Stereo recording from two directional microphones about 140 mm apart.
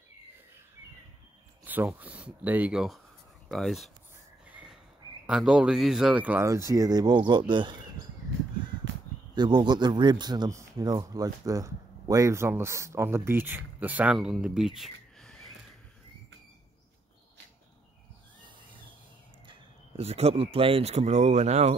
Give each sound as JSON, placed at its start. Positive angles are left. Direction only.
{"t": 1.6, "sound": "speech", "side_deg": -15}
{"t": 4.5, "sound": "a sound", "side_deg": -10}
{"t": 5.2, "sound": "a man's voice", "side_deg": -5}
{"t": 9.3, "sound": "a man's voice", "side_deg": -30}
{"t": 14.8, "sound": "a sound", "side_deg": 5}
{"t": 19.4, "sound": "speech", "side_deg": -40}